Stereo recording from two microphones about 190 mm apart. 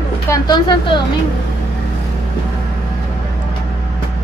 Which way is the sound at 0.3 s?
25° left (ahead or behind).